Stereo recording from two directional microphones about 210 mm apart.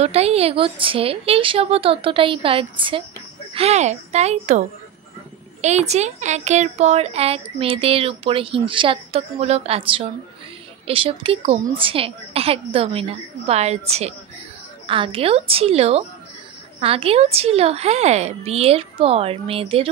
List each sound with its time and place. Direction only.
0.0 s speech: 30° right (ahead or behind)